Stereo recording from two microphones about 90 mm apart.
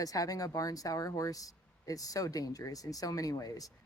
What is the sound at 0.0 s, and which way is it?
Speech, 40° left (ahead or behind).